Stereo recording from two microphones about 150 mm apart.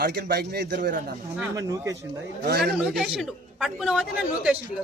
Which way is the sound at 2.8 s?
5° right (ahead or behind).